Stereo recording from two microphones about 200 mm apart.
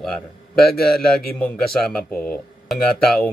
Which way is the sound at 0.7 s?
50° left (ahead or behind).